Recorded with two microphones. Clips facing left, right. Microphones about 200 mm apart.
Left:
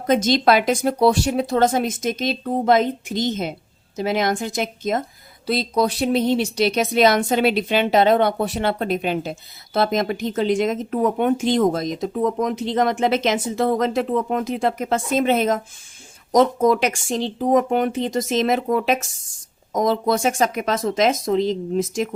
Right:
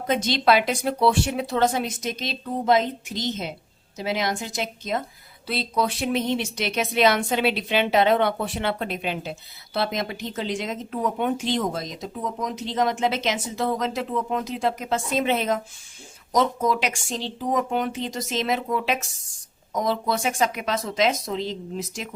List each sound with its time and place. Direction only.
0.1 s speech: 45° left (ahead or behind)